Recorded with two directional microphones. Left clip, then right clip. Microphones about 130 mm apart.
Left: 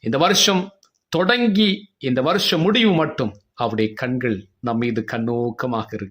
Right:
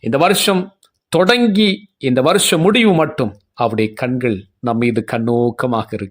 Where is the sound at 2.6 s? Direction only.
40° right (ahead or behind).